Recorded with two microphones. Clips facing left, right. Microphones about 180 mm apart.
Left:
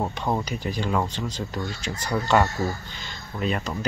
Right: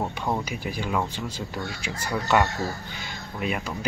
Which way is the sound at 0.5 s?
10° right (ahead or behind).